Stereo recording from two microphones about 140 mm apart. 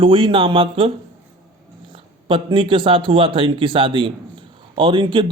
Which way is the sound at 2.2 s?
35° right (ahead or behind).